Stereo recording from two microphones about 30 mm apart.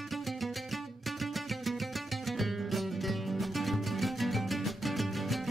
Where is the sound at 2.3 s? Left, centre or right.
Centre.